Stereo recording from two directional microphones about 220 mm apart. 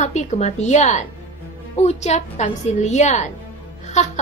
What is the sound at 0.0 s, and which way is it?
A woman's voice, 30° left (ahead or behind).